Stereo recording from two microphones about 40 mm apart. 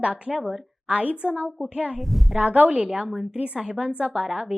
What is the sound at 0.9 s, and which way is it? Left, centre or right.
A woman's voice, right.